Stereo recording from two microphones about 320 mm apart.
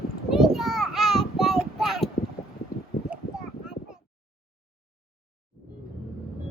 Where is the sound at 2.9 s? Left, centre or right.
Left.